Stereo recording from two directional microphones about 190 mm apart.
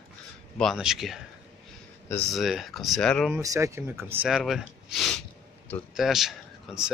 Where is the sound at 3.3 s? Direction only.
15° right (ahead or behind).